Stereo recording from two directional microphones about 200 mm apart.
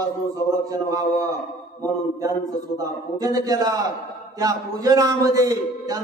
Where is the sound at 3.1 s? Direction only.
20° right (ahead or behind).